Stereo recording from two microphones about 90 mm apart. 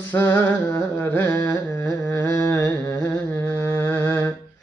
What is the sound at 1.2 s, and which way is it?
Carnatic music, 40° left (ahead or behind).